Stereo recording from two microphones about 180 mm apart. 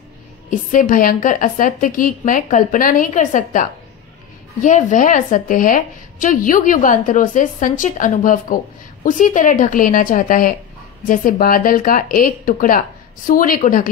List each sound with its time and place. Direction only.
0.5 s a woman's voice: 45° left (ahead or behind)